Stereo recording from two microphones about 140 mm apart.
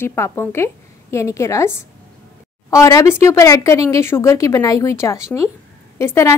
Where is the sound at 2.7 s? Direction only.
25° left (ahead or behind).